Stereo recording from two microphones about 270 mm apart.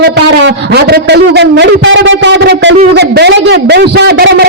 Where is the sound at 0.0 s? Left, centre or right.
Right.